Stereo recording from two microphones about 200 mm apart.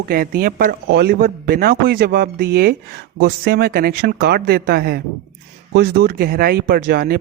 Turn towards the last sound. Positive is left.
turn(degrees=-50)  # may be behind; listen again after turning